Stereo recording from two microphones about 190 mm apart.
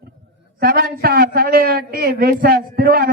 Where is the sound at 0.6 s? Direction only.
50° right (ahead or behind).